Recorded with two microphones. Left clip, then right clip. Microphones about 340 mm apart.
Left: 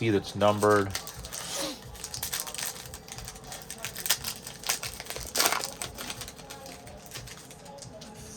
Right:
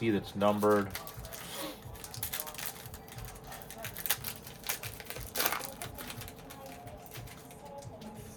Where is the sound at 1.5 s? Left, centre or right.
Left.